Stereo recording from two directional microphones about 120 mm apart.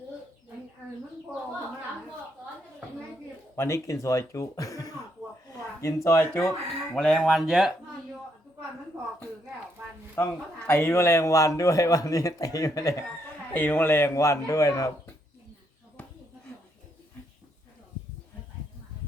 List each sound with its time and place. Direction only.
3.5 s speech: 25° left (ahead or behind)
6.9 s speech: 5° left (ahead or behind)
10.2 s a man's voice: 15° left (ahead or behind)
13.5 s a man's voice: 15° left (ahead or behind)